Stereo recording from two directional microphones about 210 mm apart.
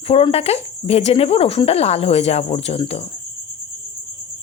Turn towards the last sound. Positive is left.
turn(degrees=30)  # may be behind; listen again after turning